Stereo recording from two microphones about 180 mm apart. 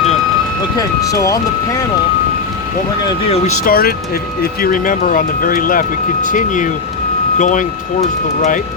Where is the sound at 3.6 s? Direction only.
55° left (ahead or behind).